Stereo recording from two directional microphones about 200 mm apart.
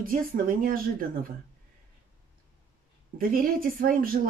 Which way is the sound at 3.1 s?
45° right (ahead or behind).